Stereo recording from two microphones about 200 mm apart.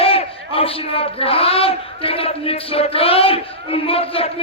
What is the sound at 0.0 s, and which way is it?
Speech, 30° left (ahead or behind).